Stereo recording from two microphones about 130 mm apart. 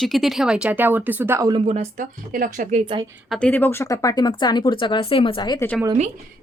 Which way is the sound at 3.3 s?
10° left (ahead or behind).